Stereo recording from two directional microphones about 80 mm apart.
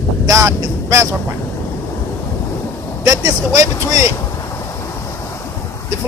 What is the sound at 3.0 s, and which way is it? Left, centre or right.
Speech, right.